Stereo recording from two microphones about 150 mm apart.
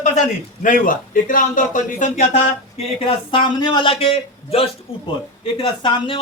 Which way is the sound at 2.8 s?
40° left (ahead or behind).